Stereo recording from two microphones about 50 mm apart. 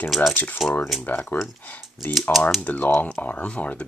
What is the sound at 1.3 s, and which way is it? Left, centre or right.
Speech, left.